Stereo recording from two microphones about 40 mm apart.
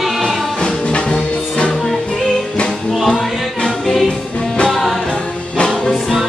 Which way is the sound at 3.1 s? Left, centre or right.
Centre.